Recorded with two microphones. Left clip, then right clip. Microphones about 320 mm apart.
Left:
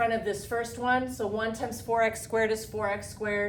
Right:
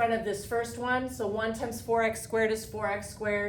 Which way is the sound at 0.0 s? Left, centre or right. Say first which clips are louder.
Even; centre.